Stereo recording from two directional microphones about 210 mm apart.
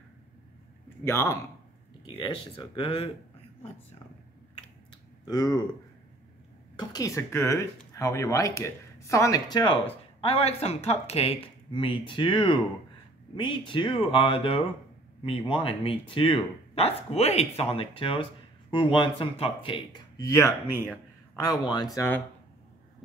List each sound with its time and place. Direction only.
1.0 s speech: 10° left (ahead or behind)
2.0 s speech: 25° left (ahead or behind)
5.2 s speech: 20° left (ahead or behind)
6.8 s speech: 20° left (ahead or behind)